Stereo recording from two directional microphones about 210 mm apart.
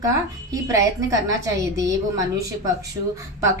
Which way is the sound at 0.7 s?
15° right (ahead or behind).